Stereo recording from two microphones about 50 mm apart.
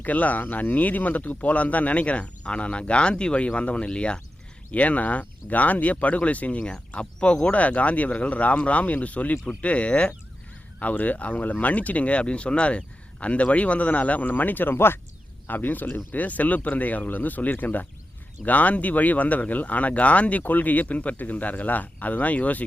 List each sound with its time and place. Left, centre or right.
0.0 s speech: left